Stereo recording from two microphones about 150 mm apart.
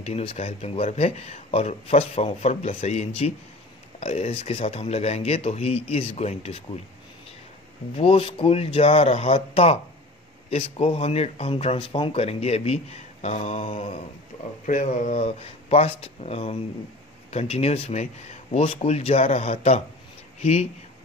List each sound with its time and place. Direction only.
0.0 s speech: 40° left (ahead or behind)
8.0 s speech: 40° left (ahead or behind)